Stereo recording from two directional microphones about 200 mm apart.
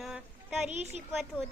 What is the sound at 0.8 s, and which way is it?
Speech, 35° right (ahead or behind).